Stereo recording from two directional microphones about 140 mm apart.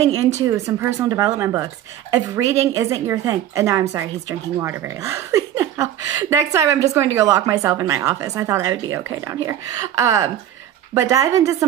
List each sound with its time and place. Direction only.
0.5 s speech: 20° right (ahead or behind)